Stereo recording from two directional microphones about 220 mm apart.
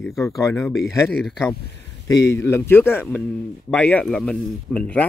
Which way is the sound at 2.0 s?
15° left (ahead or behind).